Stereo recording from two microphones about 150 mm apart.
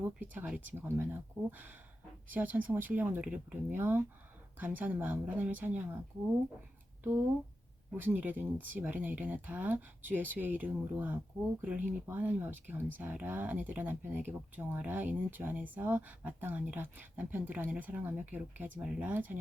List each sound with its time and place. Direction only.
0.2 s speech: 10° right (ahead or behind)
7.9 s speech: 10° right (ahead or behind)